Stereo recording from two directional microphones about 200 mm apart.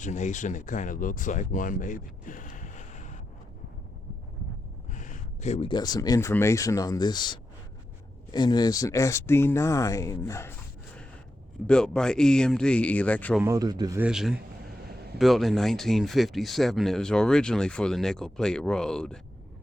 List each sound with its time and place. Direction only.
0.0 s speech: 35° left (ahead or behind)
4.9 s speech: 40° left (ahead or behind); by 10.5 s 15° left (ahead or behind)
11.6 s speech: 5° left (ahead or behind)
13.4 s speech: 15° right (ahead or behind)
14.0 s speech: centre (ahead or behind)